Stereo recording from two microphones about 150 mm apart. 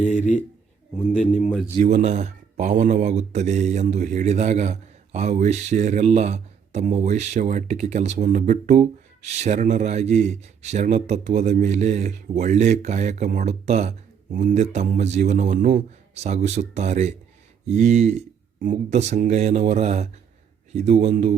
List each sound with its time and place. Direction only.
1.1 s a man's voice: centre (ahead or behind)
1.8 s speech: 50° right (ahead or behind)